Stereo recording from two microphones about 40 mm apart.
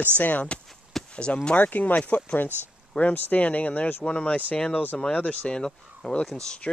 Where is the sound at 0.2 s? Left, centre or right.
Left.